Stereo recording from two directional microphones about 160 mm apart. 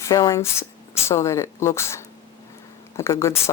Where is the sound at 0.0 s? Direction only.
20° left (ahead or behind).